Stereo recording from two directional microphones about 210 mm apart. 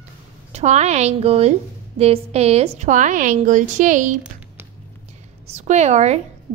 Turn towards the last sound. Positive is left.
turn(degrees=-30)  # may be behind; listen again after turning